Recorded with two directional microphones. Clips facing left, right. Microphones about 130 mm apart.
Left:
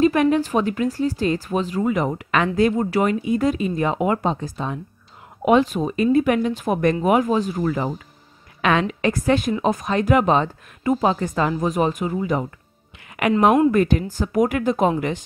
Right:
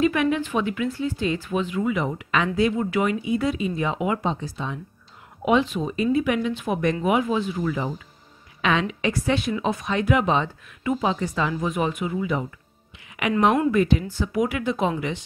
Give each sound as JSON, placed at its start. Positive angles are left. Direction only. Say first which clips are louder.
{"t": 0.0, "sound": "a woman's voice", "louder": "left 4 dB", "side_deg": 40}